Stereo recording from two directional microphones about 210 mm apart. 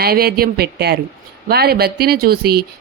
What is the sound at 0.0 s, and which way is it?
Speech, 45° right (ahead or behind).